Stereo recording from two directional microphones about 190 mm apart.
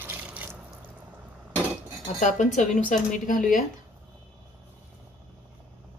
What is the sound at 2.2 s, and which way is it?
Speech, 40° left (ahead or behind).